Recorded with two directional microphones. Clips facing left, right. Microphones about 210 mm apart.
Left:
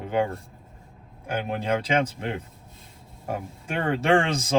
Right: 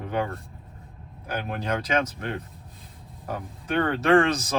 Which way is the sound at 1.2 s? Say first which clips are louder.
Left 2 dB; 25° left (ahead or behind).